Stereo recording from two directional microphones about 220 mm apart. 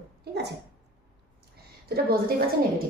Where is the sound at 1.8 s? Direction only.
45° right (ahead or behind).